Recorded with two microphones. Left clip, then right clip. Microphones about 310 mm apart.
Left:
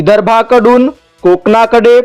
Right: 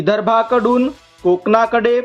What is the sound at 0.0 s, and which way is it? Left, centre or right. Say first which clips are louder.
A man's voice: left 7 dB; left.